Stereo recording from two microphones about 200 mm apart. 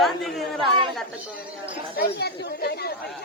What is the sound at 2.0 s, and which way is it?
Speech, 55° left (ahead or behind).